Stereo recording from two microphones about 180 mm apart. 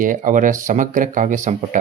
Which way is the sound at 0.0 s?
45° right (ahead or behind).